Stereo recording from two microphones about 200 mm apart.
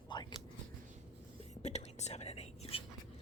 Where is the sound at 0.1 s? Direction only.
20° left (ahead or behind).